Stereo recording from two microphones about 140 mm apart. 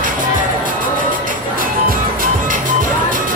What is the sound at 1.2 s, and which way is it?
Music, 90° right.